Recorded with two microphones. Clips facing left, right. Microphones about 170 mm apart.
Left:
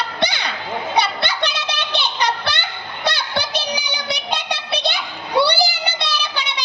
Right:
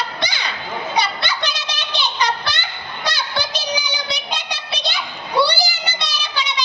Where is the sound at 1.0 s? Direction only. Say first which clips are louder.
Left 2 dB; 60° left (ahead or behind).